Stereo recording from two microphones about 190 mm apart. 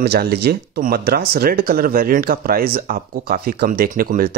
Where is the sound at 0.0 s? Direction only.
60° right (ahead or behind).